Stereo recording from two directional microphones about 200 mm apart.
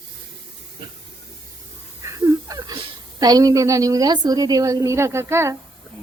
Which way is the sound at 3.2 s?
20° right (ahead or behind).